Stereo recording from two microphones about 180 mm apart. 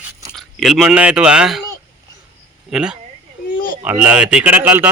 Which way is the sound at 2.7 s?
5° right (ahead or behind).